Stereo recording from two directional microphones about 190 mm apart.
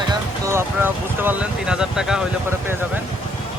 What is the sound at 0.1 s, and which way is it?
Speech, 15° right (ahead or behind).